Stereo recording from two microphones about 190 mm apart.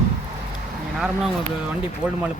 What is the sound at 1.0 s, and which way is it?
Speech, centre (ahead or behind).